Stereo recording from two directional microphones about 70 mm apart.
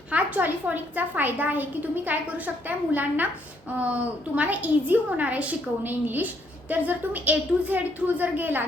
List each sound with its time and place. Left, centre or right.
0.1 s a woman's voice: right